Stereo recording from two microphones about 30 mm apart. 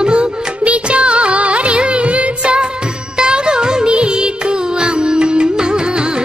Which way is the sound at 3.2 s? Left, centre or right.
Right.